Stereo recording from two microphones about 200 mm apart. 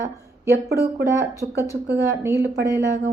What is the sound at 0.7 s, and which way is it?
Speech, 55° right (ahead or behind).